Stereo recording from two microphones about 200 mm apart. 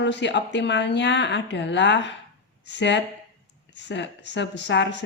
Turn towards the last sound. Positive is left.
turn(degrees=60)  # may be behind; listen again after turning